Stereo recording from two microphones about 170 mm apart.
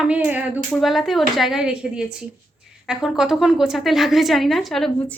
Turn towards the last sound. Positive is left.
turn(degrees=0)  # may be behind; listen again after turning